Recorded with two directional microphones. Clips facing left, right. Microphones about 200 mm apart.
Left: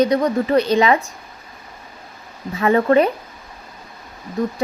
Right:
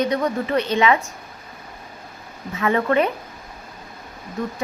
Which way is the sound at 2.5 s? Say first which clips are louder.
Left 5 dB; 35° left (ahead or behind).